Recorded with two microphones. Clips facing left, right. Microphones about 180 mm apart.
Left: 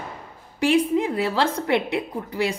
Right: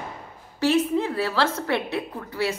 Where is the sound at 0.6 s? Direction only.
15° left (ahead or behind).